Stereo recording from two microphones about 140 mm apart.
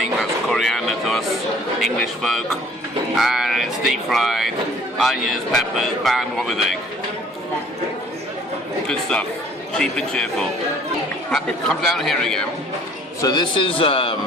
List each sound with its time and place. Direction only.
0.0 s a sound: centre (ahead or behind)
1.8 s speech: centre (ahead or behind)
8.9 s speech: 5° left (ahead or behind)
13.2 s speech: 30° left (ahead or behind)